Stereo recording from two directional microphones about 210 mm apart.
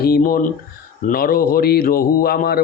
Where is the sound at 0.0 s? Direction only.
45° left (ahead or behind).